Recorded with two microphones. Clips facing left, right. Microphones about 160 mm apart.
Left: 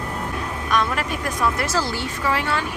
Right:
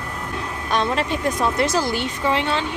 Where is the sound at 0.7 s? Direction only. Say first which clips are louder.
Right 2 dB; 25° right (ahead or behind).